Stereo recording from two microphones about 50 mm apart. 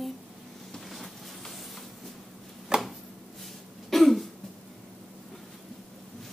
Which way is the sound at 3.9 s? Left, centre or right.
Centre.